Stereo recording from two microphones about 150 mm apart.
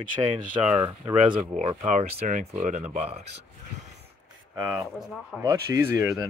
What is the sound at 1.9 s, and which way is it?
Speech, 55° right (ahead or behind).